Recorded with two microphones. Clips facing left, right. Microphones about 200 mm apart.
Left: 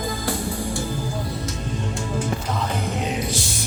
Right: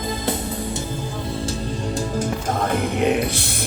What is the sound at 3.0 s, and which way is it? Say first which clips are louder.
Music: right 6 dB; 60° right (ahead or behind).